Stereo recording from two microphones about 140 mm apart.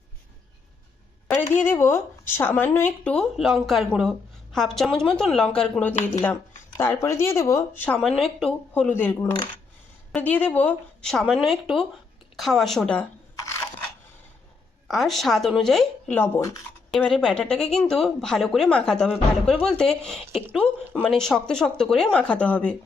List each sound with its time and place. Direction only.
1.3 s speech: 15° left (ahead or behind)
7.9 s speech: centre (ahead or behind)
8.7 s speech: 15° left (ahead or behind)
12.4 s speech: centre (ahead or behind)
14.8 s speech: centre (ahead or behind)
16.1 s speech: 15° left (ahead or behind)
16.9 s speech: 5° left (ahead or behind)